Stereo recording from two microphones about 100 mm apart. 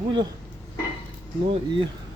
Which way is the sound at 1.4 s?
65° right (ahead or behind).